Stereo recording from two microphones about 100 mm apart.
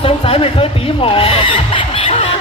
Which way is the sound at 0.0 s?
70° left (ahead or behind).